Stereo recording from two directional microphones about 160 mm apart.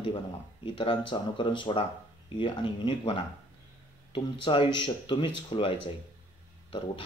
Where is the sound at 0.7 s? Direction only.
30° left (ahead or behind).